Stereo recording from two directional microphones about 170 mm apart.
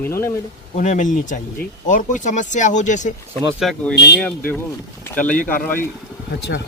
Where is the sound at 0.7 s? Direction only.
45° left (ahead or behind).